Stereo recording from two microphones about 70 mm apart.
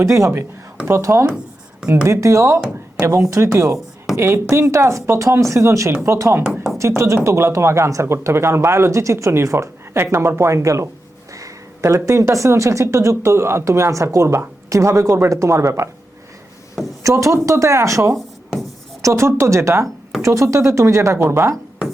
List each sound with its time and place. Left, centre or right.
0.0 s speech: right
6.4 s speech: centre
6.7 s speech: right
17.0 s speech: right
21.5 s speech: centre